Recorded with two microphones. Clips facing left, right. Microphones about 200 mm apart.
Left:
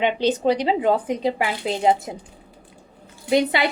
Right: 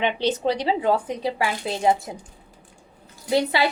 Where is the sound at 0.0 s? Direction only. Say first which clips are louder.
Left 3 dB; 15° left (ahead or behind).